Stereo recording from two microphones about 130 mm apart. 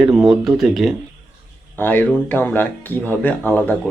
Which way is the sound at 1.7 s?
15° left (ahead or behind).